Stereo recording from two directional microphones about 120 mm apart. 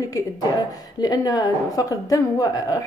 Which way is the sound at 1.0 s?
35° left (ahead or behind).